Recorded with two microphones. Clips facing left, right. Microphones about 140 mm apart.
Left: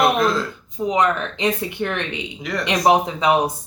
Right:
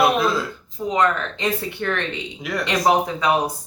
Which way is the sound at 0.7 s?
20° left (ahead or behind).